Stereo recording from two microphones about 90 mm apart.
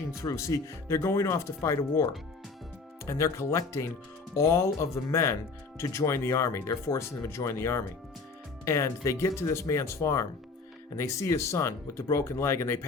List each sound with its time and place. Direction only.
0.3 s speech: 30° left (ahead or behind)
3.1 s speech: 35° left (ahead or behind)